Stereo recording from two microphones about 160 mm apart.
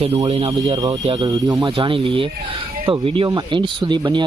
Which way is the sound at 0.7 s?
20° right (ahead or behind).